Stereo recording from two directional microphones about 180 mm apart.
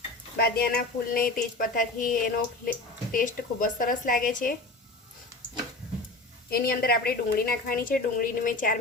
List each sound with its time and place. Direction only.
0.3 s a woman's voice: 60° left (ahead or behind)
6.5 s a woman's voice: 55° left (ahead or behind)